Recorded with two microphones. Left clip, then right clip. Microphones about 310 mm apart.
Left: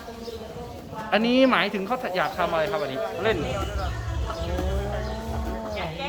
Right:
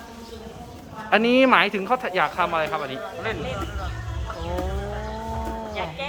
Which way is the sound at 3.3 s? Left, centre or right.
Left.